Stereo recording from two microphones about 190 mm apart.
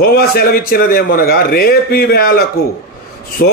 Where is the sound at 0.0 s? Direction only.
55° left (ahead or behind).